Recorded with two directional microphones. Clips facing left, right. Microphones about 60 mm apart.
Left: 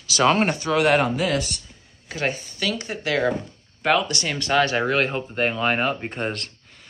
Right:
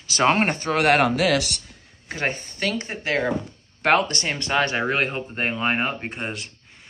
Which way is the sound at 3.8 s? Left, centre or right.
Right.